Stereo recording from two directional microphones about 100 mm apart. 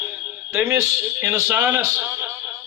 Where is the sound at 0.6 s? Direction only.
30° right (ahead or behind).